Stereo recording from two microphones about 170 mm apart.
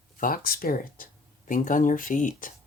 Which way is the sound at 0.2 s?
60° left (ahead or behind).